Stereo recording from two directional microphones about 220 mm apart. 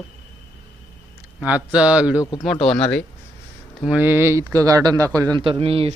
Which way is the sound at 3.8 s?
5° right (ahead or behind).